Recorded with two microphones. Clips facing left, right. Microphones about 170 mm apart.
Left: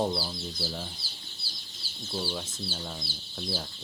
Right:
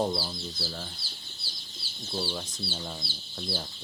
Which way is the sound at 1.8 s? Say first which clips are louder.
Left 1 dB; 45° left (ahead or behind).